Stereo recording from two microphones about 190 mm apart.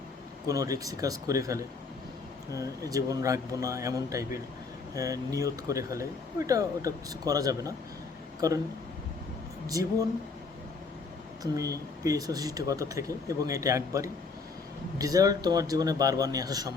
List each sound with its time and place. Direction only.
0.4 s speech: 15° right (ahead or behind)
9.7 s speech: 20° right (ahead or behind)
11.5 s a man's voice: 15° right (ahead or behind)